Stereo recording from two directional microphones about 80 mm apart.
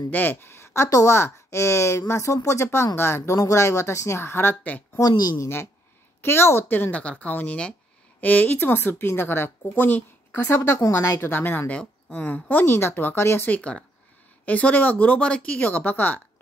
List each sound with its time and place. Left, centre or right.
0.1 s a woman's voice: left
5.0 s speech: left
6.2 s speech: left
10.4 s speech: left
13.5 s speech: centre